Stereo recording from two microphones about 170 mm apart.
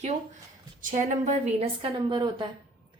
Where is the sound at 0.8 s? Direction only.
50° right (ahead or behind); by 2.5 s 25° right (ahead or behind).